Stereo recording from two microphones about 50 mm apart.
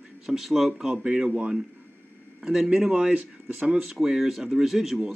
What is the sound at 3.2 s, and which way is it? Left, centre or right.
Speech, right.